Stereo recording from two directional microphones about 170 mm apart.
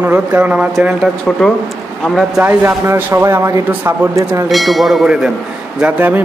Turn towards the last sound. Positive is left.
turn(degrees=-10)  # may be behind; listen again after turning